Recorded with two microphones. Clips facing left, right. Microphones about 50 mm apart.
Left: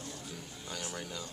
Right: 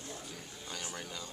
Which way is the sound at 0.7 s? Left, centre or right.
Centre.